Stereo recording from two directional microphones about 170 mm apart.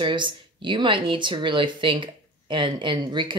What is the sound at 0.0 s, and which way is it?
Speech, 30° right (ahead or behind).